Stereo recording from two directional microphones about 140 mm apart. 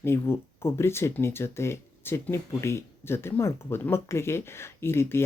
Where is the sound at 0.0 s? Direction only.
20° left (ahead or behind).